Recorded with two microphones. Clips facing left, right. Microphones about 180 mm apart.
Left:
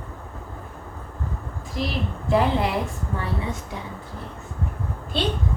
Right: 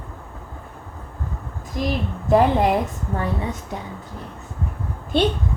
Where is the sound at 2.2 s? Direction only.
45° right (ahead or behind).